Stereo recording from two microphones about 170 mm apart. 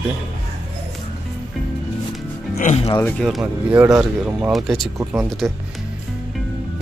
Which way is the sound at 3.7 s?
20° right (ahead or behind).